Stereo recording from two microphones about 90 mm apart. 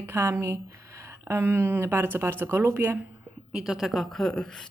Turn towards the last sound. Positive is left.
turn(degrees=10)  # may be behind; listen again after turning